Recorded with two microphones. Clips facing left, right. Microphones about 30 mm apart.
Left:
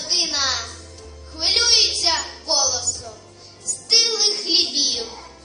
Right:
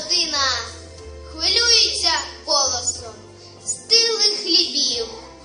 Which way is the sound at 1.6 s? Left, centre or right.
Right.